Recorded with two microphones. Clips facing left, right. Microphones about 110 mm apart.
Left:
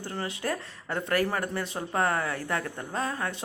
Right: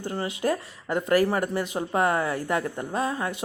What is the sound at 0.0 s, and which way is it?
Speech, 15° right (ahead or behind).